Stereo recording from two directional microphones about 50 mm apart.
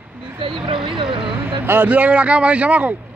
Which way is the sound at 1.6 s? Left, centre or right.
Right.